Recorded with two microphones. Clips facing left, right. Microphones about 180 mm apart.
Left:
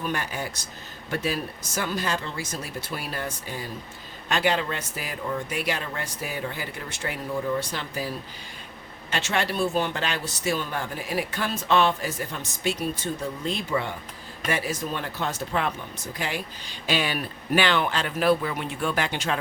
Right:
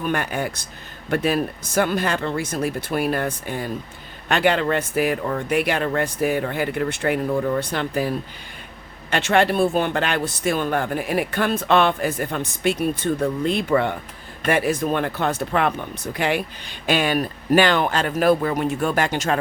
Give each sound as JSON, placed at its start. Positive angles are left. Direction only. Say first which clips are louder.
{"t": 0.0, "sound": "speech", "louder": "right 6 dB", "side_deg": -60}